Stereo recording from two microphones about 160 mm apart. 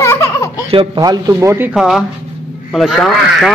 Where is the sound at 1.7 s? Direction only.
Centre (ahead or behind).